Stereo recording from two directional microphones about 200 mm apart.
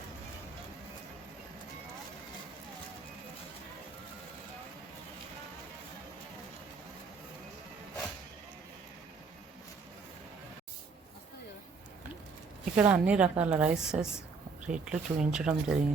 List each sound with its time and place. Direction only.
12.7 s a woman's voice: 5° right (ahead or behind)